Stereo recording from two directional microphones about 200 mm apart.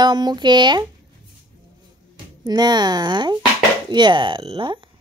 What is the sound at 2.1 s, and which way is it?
A woman's voice, 20° right (ahead or behind).